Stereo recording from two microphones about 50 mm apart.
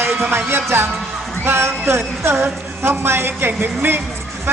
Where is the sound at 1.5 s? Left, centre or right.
Right.